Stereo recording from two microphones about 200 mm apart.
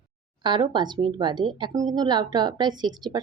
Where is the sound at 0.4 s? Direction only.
20° right (ahead or behind).